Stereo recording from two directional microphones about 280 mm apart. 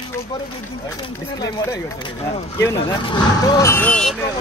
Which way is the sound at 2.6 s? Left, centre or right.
Centre.